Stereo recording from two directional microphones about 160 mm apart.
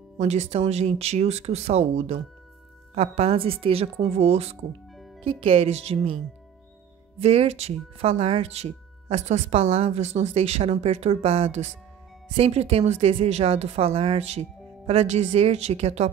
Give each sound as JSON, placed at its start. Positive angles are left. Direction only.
{"t": 0.2, "sound": "speech", "side_deg": -45}
{"t": 7.2, "sound": "speech", "side_deg": -40}